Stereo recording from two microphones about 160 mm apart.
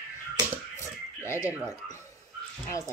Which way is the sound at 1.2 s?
20° left (ahead or behind).